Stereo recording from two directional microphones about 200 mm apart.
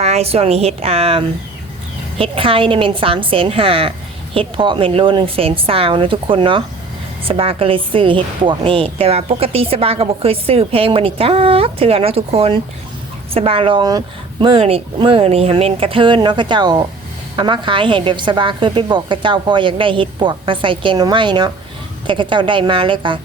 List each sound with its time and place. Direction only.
0.0 s a woman's voice: 30° right (ahead or behind)